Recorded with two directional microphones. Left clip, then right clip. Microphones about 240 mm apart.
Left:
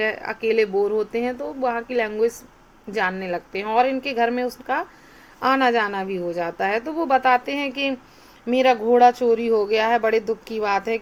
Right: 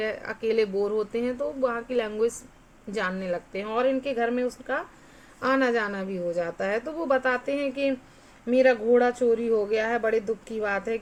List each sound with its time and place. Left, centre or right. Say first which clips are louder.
0.0 s a woman's voice: left 5 dB; centre